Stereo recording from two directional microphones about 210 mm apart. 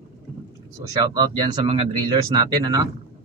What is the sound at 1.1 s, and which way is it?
A man's voice, 20° right (ahead or behind).